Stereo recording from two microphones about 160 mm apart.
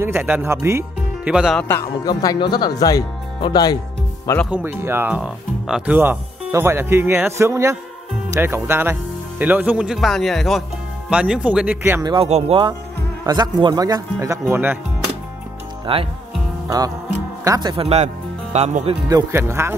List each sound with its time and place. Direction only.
0.0 s speech: 15° right (ahead or behind)
1.3 s speech: 5° right (ahead or behind)
1.6 s speech: 15° left (ahead or behind)
2.0 s speech: 25° left (ahead or behind)
4.5 s speech: 10° right (ahead or behind)
12.0 s speech: 25° right (ahead or behind)
12.3 s speech: 40° right (ahead or behind)
13.2 s speech: 25° right (ahead or behind)
15.9 s speech: 35° right (ahead or behind)
16.6 s music: 20° right (ahead or behind)
17.5 s speech: 30° right (ahead or behind); by 18.9 s 45° right (ahead or behind)
19.0 s speech: 20° right (ahead or behind)